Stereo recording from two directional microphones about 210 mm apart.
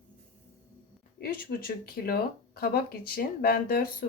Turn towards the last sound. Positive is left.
turn(degrees=45)  # may be behind; listen again after turning